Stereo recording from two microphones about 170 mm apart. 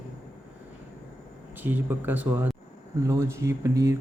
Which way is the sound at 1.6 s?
10° right (ahead or behind).